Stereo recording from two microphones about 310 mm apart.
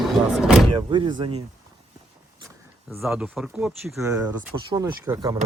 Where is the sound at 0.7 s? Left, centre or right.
Centre.